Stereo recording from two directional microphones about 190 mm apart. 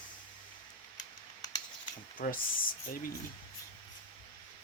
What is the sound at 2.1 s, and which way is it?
Speech, 45° left (ahead or behind).